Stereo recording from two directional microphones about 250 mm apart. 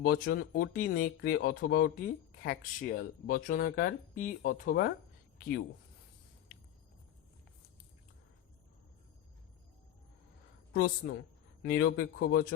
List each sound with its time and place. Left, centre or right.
0.0 s speech: left
10.8 s speech: left